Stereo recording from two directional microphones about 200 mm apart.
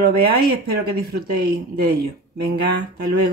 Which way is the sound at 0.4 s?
50° right (ahead or behind).